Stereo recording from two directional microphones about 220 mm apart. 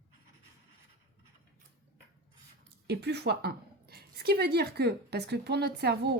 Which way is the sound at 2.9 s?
50° right (ahead or behind).